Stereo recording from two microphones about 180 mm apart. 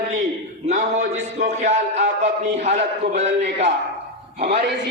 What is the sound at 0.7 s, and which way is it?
A man's voice, 40° right (ahead or behind).